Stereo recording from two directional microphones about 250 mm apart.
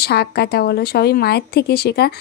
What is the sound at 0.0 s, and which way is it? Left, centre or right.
Speech, left.